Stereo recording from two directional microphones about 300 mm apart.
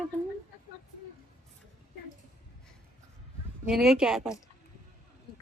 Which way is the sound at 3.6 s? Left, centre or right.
Centre.